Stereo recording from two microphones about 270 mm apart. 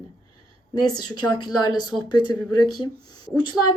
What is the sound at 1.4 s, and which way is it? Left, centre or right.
Speech, centre.